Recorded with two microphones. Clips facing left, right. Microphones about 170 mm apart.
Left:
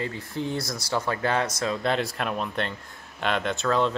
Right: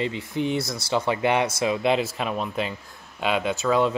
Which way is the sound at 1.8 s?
5° right (ahead or behind).